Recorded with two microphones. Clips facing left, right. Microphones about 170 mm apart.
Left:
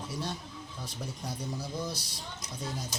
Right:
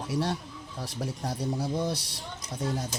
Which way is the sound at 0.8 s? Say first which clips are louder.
Right 7 dB; 80° right.